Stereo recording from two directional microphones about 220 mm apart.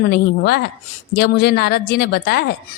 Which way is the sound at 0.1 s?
45° left (ahead or behind).